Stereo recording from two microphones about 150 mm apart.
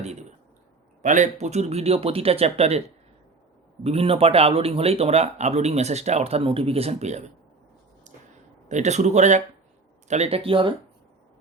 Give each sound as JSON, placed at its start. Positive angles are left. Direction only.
{"t": 0.0, "sound": "a sound", "side_deg": -50}
{"t": 1.0, "sound": "speech", "side_deg": -55}
{"t": 3.8, "sound": "speech", "side_deg": -40}
{"t": 8.7, "sound": "speech", "side_deg": -50}